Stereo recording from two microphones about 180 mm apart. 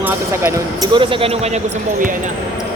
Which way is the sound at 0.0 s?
15° right (ahead or behind).